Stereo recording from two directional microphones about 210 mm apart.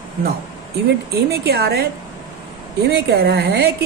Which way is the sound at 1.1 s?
50° right (ahead or behind).